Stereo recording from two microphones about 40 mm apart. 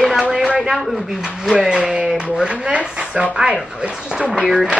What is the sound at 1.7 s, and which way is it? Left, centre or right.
Speech, right.